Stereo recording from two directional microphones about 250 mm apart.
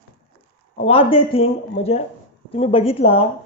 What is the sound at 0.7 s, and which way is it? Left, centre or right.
Speech, left.